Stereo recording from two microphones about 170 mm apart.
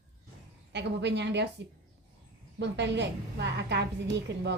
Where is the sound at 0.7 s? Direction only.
90° right.